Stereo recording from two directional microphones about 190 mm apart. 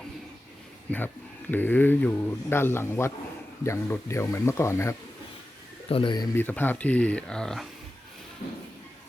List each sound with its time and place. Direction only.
0.9 s speech: 10° left (ahead or behind)
5.9 s speech: 25° left (ahead or behind)
6.3 s speech: 10° left (ahead or behind)